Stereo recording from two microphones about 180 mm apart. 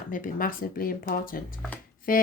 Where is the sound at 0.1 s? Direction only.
50° left (ahead or behind).